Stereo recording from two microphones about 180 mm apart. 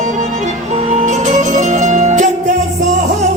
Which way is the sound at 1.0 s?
40° right (ahead or behind).